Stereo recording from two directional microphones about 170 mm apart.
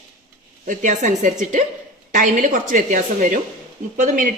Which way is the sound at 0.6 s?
50° right (ahead or behind).